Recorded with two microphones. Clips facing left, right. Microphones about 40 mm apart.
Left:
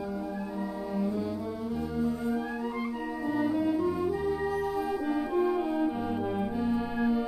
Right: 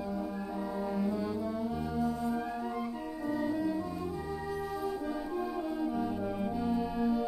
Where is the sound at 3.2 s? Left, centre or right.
Left.